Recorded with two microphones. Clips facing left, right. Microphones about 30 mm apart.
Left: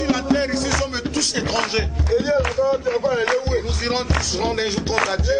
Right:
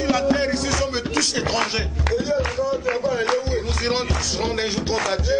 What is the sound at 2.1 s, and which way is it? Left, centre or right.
Speech, centre.